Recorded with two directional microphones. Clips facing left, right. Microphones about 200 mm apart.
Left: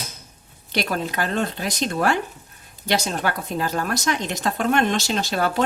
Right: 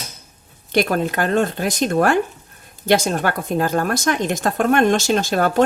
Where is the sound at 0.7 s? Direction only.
50° right (ahead or behind).